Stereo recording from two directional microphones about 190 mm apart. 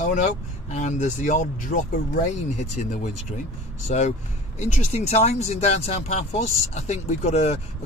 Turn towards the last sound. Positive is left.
turn(degrees=35)  # may be behind; listen again after turning